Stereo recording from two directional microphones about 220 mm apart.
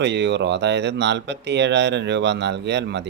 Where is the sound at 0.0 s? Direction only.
50° right (ahead or behind).